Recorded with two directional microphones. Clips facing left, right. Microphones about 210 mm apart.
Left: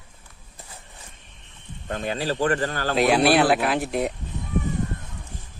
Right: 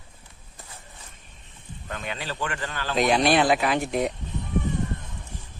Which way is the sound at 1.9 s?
35° left (ahead or behind).